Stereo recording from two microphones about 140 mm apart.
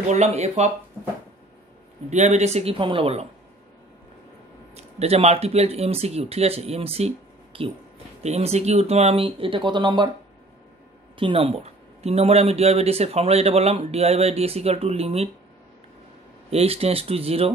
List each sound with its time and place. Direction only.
0.1 s speech: 50° right (ahead or behind)
2.0 s speech: 55° right (ahead or behind)
4.7 s speech: 50° right (ahead or behind)
11.1 s speech: 40° right (ahead or behind)
16.4 s speech: 45° right (ahead or behind)